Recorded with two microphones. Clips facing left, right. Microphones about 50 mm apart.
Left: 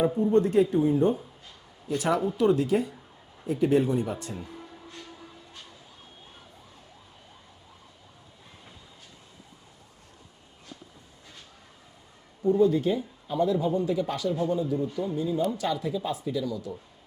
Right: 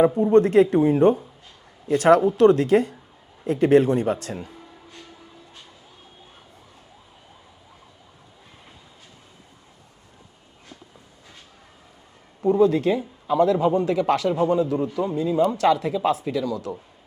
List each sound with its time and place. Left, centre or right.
0.2 s speech: right
12.5 s speech: right